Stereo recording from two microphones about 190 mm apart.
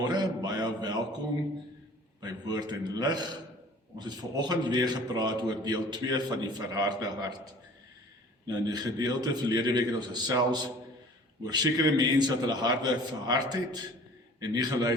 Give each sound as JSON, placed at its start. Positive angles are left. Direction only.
{"t": 0.0, "sound": "mantra", "side_deg": -20}
{"t": 2.5, "sound": "a man's voice", "side_deg": -20}
{"t": 8.4, "sound": "a man's voice", "side_deg": -20}